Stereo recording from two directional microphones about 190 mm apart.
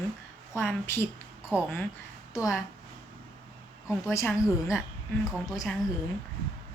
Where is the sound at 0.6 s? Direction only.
10° left (ahead or behind).